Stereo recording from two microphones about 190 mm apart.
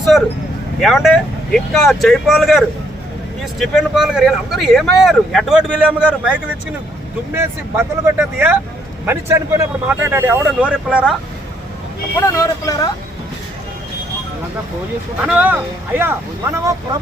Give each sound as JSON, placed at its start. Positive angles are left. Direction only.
{"t": 0.1, "sound": "speech", "side_deg": 0}
{"t": 12.2, "sound": "speech", "side_deg": 20}
{"t": 15.2, "sound": "speech", "side_deg": -5}